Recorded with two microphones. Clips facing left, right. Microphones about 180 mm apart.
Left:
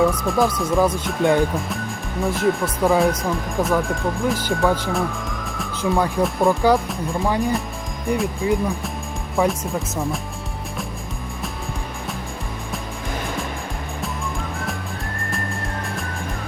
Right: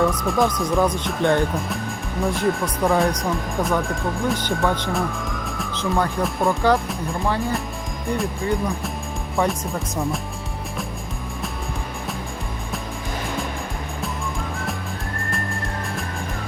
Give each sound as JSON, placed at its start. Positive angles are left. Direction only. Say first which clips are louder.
{"t": 0.0, "sound": "speech", "louder": "left 1 dB", "side_deg": 5}
{"t": 5.5, "sound": "music", "louder": "left 3 dB", "side_deg": 0}
{"t": 6.2, "sound": "speech", "louder": "left 3 dB", "side_deg": 0}
{"t": 7.3, "sound": "speech", "louder": "left 2 dB", "side_deg": 15}
{"t": 8.4, "sound": "speech", "louder": "left 3 dB", "side_deg": 0}